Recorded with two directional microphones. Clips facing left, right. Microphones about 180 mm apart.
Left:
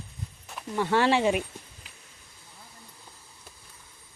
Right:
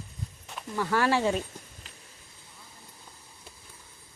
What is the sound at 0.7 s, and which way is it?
Speech, 25° left (ahead or behind).